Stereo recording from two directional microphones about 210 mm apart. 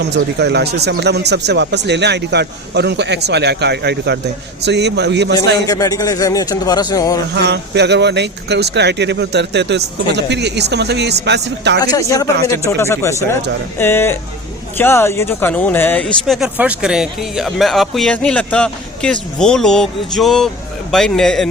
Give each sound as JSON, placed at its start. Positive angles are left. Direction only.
{"t": 0.0, "sound": "a man's voice", "side_deg": -50}
{"t": 5.6, "sound": "speech", "side_deg": 15}
{"t": 7.3, "sound": "speech", "side_deg": -55}
{"t": 11.8, "sound": "speech", "side_deg": 15}